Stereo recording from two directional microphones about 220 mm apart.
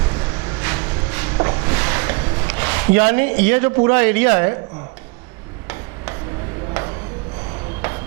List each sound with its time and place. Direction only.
0.1 s vehicle: 15° right (ahead or behind)
1.4 s a sound: 20° right (ahead or behind)
3.4 s a man's voice: 15° right (ahead or behind)